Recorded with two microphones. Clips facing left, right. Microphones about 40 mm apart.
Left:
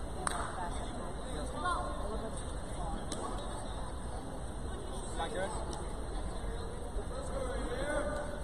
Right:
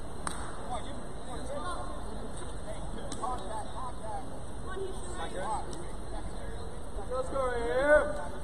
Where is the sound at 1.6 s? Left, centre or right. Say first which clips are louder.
Left 3 dB; left.